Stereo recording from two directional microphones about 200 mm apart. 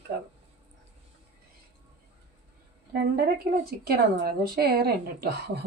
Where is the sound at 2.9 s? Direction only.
50° right (ahead or behind).